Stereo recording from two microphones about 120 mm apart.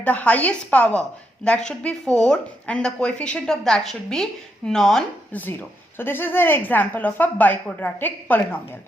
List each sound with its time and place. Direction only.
0.0 s a woman's voice: 10° left (ahead or behind)